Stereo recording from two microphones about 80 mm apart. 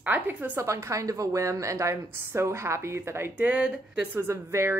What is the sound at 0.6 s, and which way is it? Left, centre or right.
Speech, right.